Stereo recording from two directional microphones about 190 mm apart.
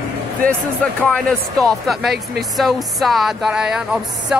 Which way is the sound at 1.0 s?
5° left (ahead or behind).